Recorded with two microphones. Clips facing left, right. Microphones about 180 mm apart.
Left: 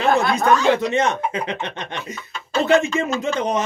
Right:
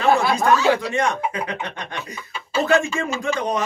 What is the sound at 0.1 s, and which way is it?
Speech, 5° right (ahead or behind).